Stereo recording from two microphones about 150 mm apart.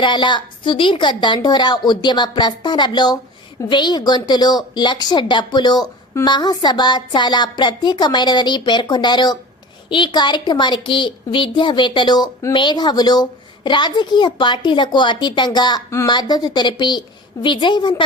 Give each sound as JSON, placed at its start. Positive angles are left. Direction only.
{"t": 0.0, "sound": "a woman's voice", "side_deg": 30}